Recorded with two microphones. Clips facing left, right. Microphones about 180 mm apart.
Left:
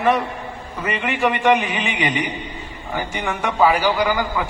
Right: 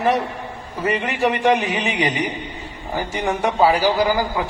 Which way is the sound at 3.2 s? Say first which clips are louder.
Right 1 dB; 35° right (ahead or behind).